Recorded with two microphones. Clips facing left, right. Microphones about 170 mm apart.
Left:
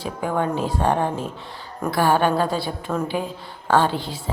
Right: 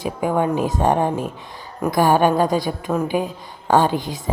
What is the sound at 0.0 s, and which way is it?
A woman's voice, 15° right (ahead or behind).